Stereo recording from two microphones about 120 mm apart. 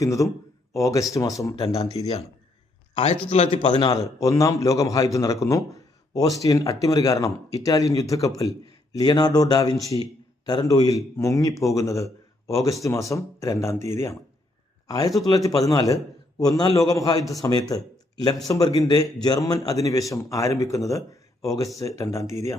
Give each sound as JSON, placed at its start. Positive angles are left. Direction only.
{"t": 0.0, "sound": "a man's voice", "side_deg": 25}
{"t": 2.9, "sound": "a man's voice", "side_deg": 60}
{"t": 4.2, "sound": "a man's voice", "side_deg": 25}